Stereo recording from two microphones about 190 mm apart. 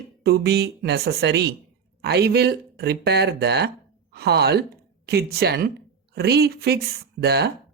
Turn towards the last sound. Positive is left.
turn(degrees=-60)  # may be behind; listen again after turning